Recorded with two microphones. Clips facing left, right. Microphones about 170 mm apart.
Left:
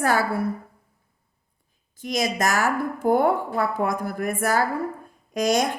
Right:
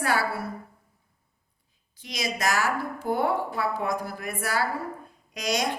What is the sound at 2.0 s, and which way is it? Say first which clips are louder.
A woman's voice: left 7 dB; 50° left (ahead or behind).